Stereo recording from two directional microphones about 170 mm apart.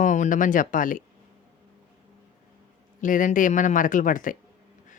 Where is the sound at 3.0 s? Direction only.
50° left (ahead or behind).